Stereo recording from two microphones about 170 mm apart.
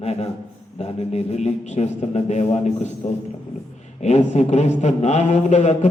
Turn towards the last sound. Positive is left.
turn(degrees=45)  # may be behind; listen again after turning